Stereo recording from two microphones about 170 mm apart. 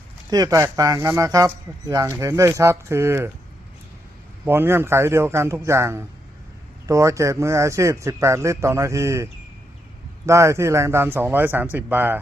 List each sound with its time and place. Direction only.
0.3 s speech: 20° right (ahead or behind)
4.4 s speech: 15° right (ahead or behind)